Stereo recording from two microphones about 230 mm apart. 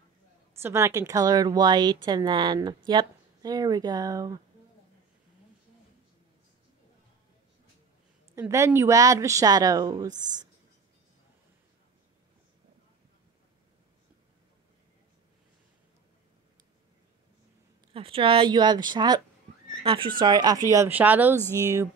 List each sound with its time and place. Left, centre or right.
0.6 s speech: centre
8.4 s speech: centre
17.9 s speech: right; by 21.4 s centre